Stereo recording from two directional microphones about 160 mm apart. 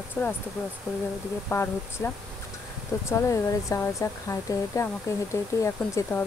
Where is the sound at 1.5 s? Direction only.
15° left (ahead or behind).